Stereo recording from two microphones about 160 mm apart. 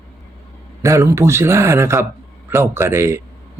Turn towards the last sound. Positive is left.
turn(degrees=-15)  # may be behind; listen again after turning